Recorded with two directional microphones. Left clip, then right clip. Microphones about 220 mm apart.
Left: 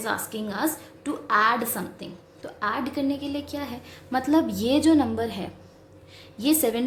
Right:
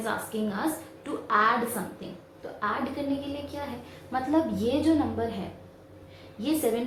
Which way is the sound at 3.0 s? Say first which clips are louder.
Left 4 dB; 55° left (ahead or behind).